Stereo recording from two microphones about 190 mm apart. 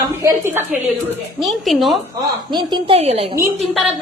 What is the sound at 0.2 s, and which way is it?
Speech, 15° right (ahead or behind).